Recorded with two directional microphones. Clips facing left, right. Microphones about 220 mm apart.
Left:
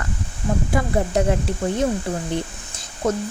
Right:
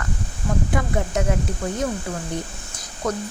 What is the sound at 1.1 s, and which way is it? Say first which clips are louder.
Speech: left 5 dB; 35° left (ahead or behind).